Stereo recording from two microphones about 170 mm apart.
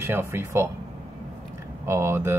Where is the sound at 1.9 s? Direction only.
15° right (ahead or behind).